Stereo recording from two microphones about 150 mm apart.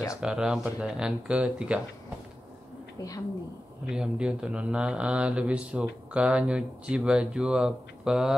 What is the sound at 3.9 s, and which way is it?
Speech, 5° right (ahead or behind).